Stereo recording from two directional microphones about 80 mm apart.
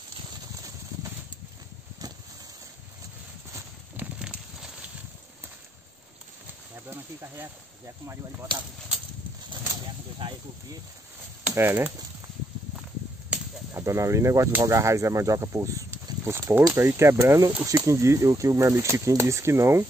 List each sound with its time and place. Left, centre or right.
0.6 s clip-clop: right
3.9 s a sound: centre
6.7 s speech: right
11.5 s speech: right
13.7 s speech: right